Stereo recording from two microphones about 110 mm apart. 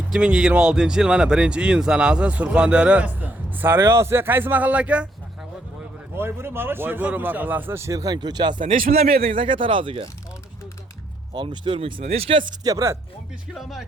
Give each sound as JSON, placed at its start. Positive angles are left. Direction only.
{"t": 0.1, "sound": "speech", "side_deg": -10}
{"t": 6.1, "sound": "speech", "side_deg": -20}
{"t": 9.2, "sound": "speech", "side_deg": -55}
{"t": 11.3, "sound": "speech", "side_deg": -45}
{"t": 12.0, "sound": "speech", "side_deg": -65}
{"t": 12.6, "sound": "speech", "side_deg": -30}
{"t": 13.5, "sound": "speech", "side_deg": 0}